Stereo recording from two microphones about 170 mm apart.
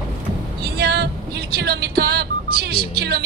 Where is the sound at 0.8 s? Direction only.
70° right (ahead or behind).